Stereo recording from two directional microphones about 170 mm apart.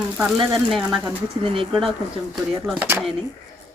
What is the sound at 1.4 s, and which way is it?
Speech, 30° right (ahead or behind).